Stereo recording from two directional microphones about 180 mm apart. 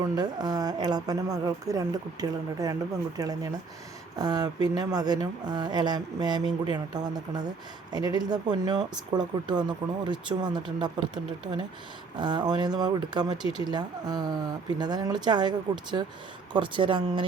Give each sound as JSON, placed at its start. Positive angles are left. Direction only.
{"t": 0.0, "sound": "speech", "side_deg": -20}